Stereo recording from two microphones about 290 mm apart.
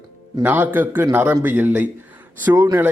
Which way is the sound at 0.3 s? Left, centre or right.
Centre.